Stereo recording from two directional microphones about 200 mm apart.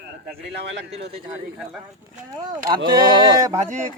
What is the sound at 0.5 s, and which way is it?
Speech, 60° right (ahead or behind).